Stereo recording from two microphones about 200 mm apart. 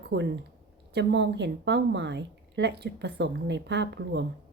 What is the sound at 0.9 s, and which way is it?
A woman's voice, 60° right (ahead or behind).